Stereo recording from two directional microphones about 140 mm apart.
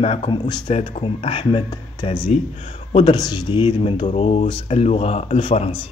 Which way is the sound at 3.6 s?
40° left (ahead or behind).